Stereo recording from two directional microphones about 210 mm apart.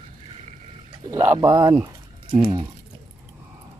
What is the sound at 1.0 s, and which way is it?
Speech, 15° right (ahead or behind).